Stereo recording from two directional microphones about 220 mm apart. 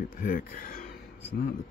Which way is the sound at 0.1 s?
40° left (ahead or behind).